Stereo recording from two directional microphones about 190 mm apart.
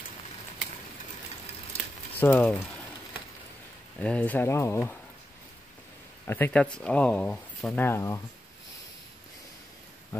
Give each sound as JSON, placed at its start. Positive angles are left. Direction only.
{"t": 2.1, "sound": "speech", "side_deg": 10}
{"t": 4.0, "sound": "speech", "side_deg": 5}
{"t": 6.2, "sound": "speech", "side_deg": 10}